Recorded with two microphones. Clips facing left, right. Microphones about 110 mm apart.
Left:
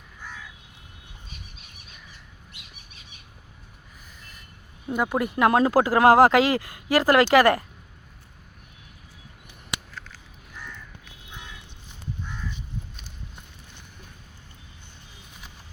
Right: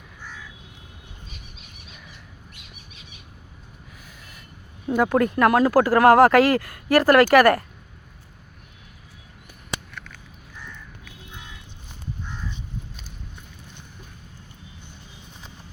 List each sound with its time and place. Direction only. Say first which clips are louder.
4.9 s speech: right 5 dB; centre (ahead or behind)
5.1 s speech: right 3 dB; 10° left (ahead or behind)
5.5 s speech: even; 25° left (ahead or behind)